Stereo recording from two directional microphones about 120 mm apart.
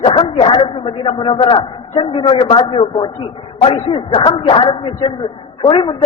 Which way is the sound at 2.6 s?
55° left (ahead or behind).